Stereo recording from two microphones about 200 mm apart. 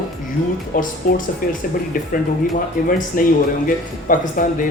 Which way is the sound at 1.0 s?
45° left (ahead or behind).